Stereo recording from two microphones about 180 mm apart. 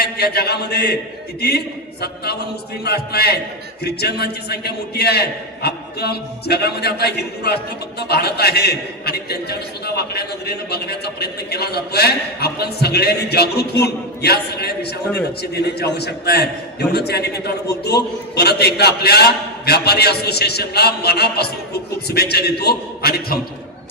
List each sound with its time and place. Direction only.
0.0 s a man's voice: 60° left (ahead or behind)